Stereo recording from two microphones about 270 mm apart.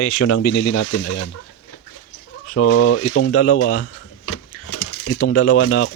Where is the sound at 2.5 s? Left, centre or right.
Left.